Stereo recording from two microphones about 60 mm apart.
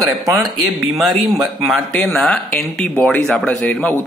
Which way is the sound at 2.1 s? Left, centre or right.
Centre.